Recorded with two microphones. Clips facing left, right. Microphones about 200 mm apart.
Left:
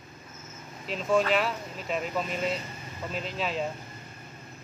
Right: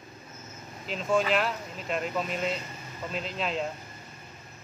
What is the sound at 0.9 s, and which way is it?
Speech, centre (ahead or behind).